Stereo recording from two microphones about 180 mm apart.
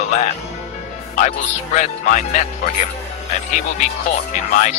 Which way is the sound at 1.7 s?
45° left (ahead or behind).